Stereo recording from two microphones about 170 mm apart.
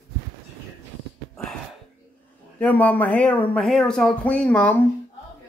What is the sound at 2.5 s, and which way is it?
Speech, 10° left (ahead or behind).